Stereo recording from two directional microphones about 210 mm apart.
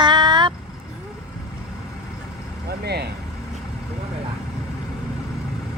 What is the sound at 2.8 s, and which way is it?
Speech, 50° right (ahead or behind).